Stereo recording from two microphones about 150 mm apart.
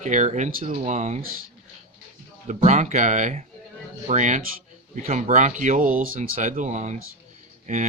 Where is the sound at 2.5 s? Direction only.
50° right (ahead or behind).